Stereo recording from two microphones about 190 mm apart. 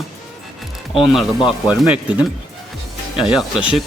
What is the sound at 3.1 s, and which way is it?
Speech, 5° right (ahead or behind).